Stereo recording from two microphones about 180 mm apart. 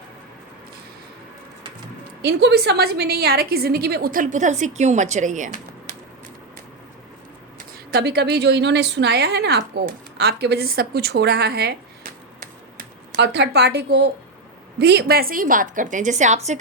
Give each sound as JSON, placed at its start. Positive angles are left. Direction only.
{"t": 2.2, "sound": "a woman's voice", "side_deg": -65}
{"t": 7.9, "sound": "a woman's voice", "side_deg": -65}
{"t": 13.1, "sound": "a woman's voice", "side_deg": -70}